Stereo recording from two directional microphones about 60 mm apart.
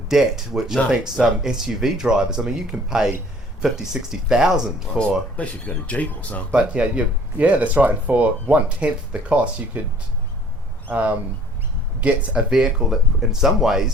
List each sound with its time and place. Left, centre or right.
0.1 s speech: centre
4.9 s speech: left
6.5 s speech: centre
10.8 s speech: right
12.5 s speech: centre